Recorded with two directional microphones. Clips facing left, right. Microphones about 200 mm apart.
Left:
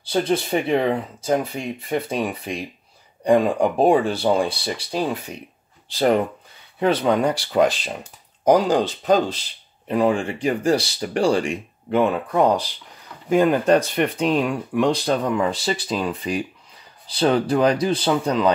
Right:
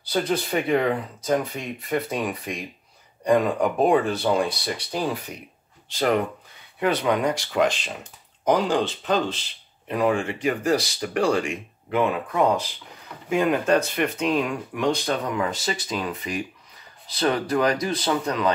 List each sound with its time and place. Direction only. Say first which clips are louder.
0.0 s speech: left 3 dB; 30° left (ahead or behind)